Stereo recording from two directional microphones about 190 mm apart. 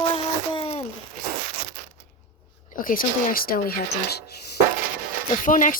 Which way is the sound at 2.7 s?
45° left (ahead or behind).